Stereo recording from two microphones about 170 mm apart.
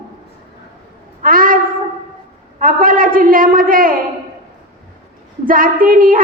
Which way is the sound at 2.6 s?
55° right (ahead or behind).